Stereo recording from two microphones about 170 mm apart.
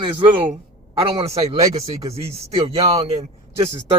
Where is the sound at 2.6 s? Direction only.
35° right (ahead or behind).